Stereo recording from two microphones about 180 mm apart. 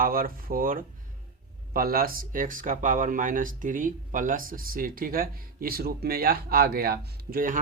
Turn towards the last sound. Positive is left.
turn(degrees=-50)  # may be behind; listen again after turning